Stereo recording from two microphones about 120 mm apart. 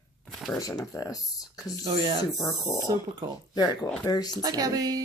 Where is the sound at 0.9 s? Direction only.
30° left (ahead or behind).